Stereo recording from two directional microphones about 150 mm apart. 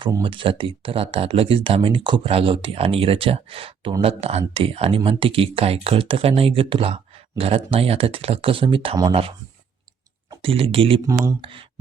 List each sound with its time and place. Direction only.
0.2 s speech: 35° right (ahead or behind)
10.4 s speech: 35° right (ahead or behind)
11.0 s speech: 20° right (ahead or behind)
11.3 s speech: 35° right (ahead or behind)